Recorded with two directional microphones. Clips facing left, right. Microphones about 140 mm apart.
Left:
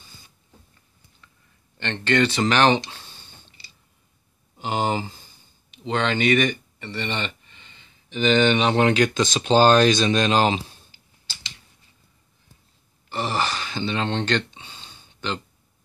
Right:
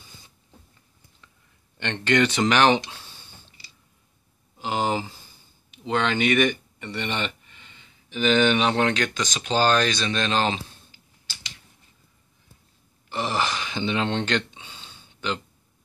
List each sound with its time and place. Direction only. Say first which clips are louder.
1.8 s speech: even; 10° right (ahead or behind)
4.6 s a sound: left 1 dB; centre (ahead or behind)
5.9 s speech: left 1 dB; 5° right (ahead or behind)
9.1 s speech: left 7 dB; 25° left (ahead or behind)
13.1 s speech: left 1 dB; 10° right (ahead or behind)